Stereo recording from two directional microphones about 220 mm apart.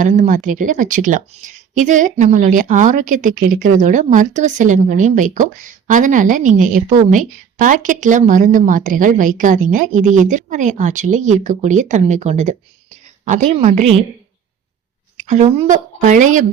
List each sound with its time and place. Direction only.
0.0 s speech: 35° right (ahead or behind)
15.2 s a woman's voice: 30° right (ahead or behind)